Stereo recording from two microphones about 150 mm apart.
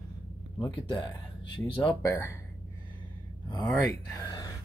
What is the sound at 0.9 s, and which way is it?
Speech, 30° left (ahead or behind).